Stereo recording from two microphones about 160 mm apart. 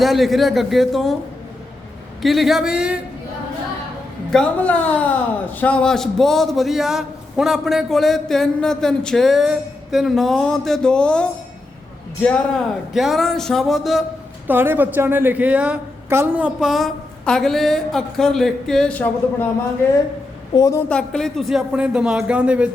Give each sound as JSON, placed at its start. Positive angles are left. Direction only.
{"t": 0.0, "sound": "a man's voice", "side_deg": 0}
{"t": 2.2, "sound": "a man's voice", "side_deg": 0}
{"t": 4.3, "sound": "a woman's voice", "side_deg": 5}
{"t": 14.4, "sound": "a man's voice", "side_deg": -15}
{"t": 20.5, "sound": "a woman's voice", "side_deg": 20}
{"t": 20.9, "sound": "a man's voice", "side_deg": 5}